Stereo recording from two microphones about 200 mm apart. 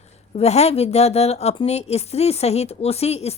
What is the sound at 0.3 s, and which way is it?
A woman's voice, 30° left (ahead or behind).